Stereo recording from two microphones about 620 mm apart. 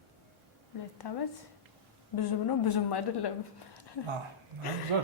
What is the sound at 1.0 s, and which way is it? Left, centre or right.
A woman's voice, left.